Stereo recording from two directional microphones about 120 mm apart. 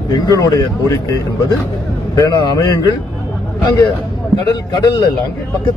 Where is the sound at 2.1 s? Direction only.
30° left (ahead or behind).